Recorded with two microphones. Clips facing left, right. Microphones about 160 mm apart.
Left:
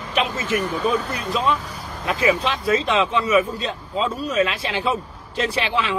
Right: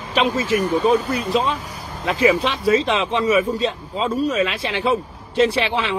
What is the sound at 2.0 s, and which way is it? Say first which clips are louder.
Speech: right 3 dB; 30° right (ahead or behind).